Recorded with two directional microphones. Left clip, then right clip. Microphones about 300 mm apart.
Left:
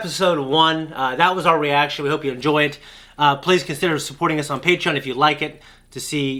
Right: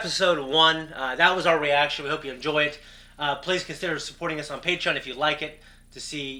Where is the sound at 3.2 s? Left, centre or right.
Left.